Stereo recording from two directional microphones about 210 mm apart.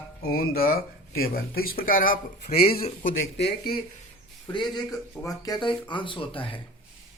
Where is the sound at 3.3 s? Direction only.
50° left (ahead or behind).